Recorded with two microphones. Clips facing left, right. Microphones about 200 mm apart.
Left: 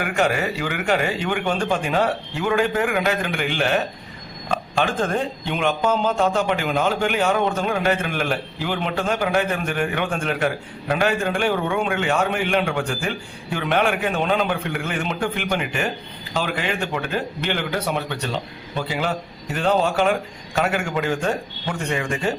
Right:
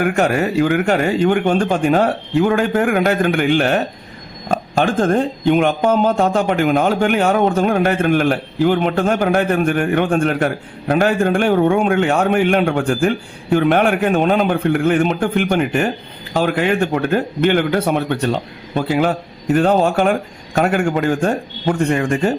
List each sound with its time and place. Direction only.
0.0 s speech: 45° right (ahead or behind)